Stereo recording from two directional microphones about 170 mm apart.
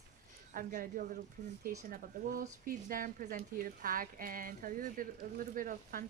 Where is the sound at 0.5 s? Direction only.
55° right (ahead or behind).